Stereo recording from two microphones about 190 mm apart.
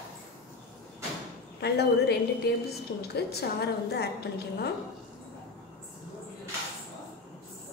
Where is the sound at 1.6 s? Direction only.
60° left (ahead or behind).